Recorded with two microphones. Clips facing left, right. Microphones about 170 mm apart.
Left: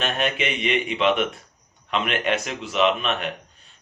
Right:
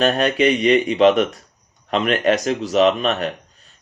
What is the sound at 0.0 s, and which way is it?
Speech, 40° right (ahead or behind).